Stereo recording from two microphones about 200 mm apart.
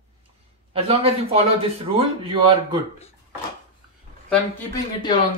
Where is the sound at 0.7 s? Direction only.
30° right (ahead or behind).